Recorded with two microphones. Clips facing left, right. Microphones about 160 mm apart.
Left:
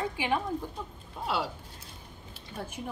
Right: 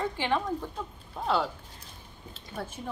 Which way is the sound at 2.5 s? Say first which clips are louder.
Right 1 dB; 10° left (ahead or behind).